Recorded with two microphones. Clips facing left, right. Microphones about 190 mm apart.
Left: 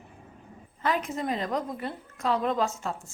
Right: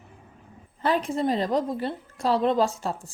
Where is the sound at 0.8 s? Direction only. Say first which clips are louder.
Right 4 dB; 30° right (ahead or behind).